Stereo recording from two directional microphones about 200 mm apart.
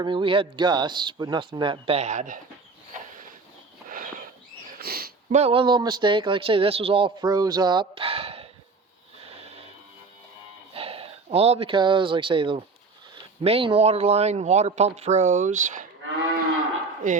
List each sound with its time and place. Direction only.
0.0 s a man's voice: 25° right (ahead or behind)
3.8 s a sound: 45° right (ahead or behind)
4.8 s sniff: 50° right (ahead or behind)
5.3 s a man's voice: 30° right (ahead or behind)
10.8 s speech: 30° right (ahead or behind)
17.0 s speech: 40° right (ahead or behind)